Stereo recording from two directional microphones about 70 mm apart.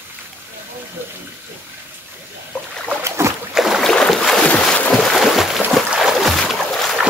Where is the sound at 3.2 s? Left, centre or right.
Right.